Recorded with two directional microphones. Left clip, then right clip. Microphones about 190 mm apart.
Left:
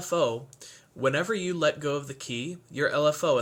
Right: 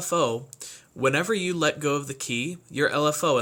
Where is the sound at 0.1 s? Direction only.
25° right (ahead or behind).